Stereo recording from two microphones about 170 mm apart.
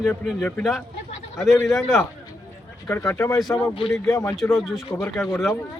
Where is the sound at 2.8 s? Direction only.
15° left (ahead or behind).